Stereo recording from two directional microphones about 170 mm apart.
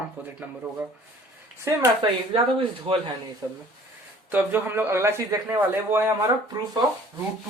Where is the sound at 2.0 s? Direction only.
30° right (ahead or behind).